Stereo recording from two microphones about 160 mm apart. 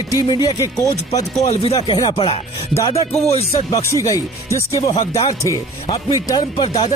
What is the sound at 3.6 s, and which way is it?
Speech, 20° left (ahead or behind).